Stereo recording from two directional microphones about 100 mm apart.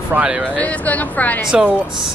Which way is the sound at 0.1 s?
10° right (ahead or behind).